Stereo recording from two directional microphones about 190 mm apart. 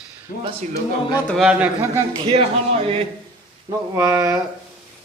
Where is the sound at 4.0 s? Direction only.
15° right (ahead or behind).